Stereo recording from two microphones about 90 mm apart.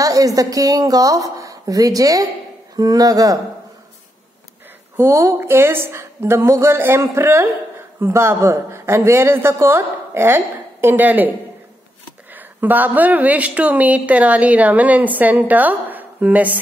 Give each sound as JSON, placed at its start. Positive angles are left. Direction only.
{"t": 0.0, "sound": "a woman's voice", "side_deg": -40}
{"t": 4.9, "sound": "a woman's voice", "side_deg": -30}
{"t": 12.4, "sound": "a woman's voice", "side_deg": -20}